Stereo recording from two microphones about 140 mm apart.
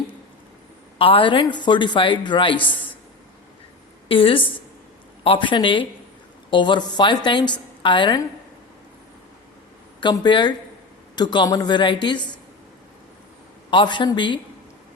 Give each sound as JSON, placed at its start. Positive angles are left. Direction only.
{"t": 0.9, "sound": "a woman's voice", "side_deg": 40}
{"t": 4.1, "sound": "a woman's voice", "side_deg": 40}
{"t": 10.0, "sound": "a woman's voice", "side_deg": 35}
{"t": 13.7, "sound": "a woman's voice", "side_deg": 35}